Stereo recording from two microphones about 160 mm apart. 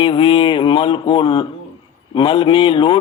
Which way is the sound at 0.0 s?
35° left (ahead or behind).